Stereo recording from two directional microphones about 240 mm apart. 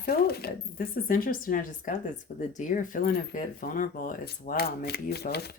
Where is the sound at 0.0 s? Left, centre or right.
Left.